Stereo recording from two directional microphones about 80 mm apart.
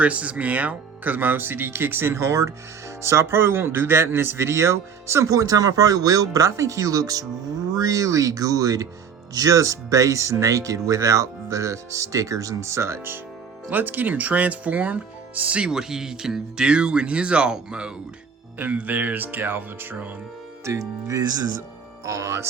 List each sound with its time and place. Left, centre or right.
0.0 s speech: centre; by 13.1 s right
13.7 s speech: right
20.7 s speech: right
22.0 s speech: right